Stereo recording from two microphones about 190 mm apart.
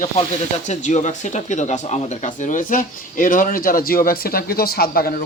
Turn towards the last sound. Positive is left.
turn(degrees=50)  # may be behind; listen again after turning